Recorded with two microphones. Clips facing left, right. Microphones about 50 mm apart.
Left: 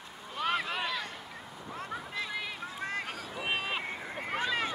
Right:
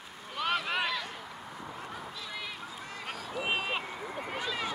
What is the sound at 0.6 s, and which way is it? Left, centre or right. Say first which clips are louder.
Boat: right 2 dB; centre.